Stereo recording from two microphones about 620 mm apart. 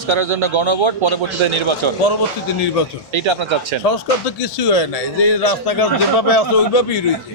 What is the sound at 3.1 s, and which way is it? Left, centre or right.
Speech, right.